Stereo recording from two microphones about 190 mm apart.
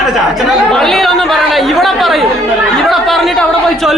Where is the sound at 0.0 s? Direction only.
Centre (ahead or behind).